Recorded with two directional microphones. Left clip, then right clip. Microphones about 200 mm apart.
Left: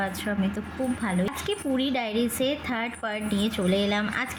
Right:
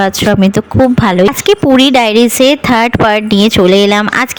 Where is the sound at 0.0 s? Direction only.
50° right (ahead or behind).